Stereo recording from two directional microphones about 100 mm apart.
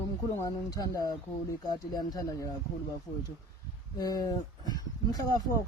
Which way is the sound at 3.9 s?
40° left (ahead or behind).